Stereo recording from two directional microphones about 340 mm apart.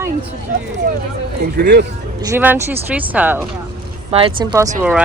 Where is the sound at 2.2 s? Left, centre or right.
Centre.